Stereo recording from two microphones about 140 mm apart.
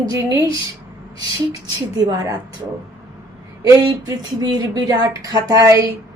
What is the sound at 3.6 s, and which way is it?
Speech, 25° right (ahead or behind).